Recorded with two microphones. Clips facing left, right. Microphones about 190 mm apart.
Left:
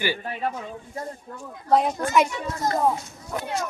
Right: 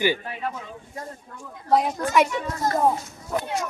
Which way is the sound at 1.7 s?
Centre (ahead or behind).